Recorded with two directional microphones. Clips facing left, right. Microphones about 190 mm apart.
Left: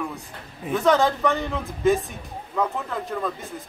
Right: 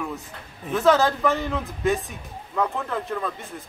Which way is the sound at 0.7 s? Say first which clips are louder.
Right 1 dB; centre (ahead or behind).